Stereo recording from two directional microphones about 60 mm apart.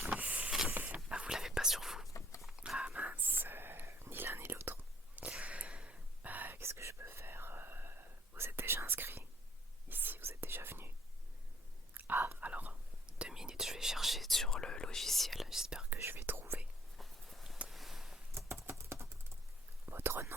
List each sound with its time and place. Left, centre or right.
0.0 s power windows: right
0.7 s a sound: right
1.1 s whispering: centre; by 4.8 s right
5.1 s whispering: right
6.6 s whispering: right
11.9 s whispering: right
13.1 s whispering: centre
16.0 s whispering: right
17.0 s walk: centre
17.7 s a sound: centre
18.6 s typing: right
19.8 s whispering: right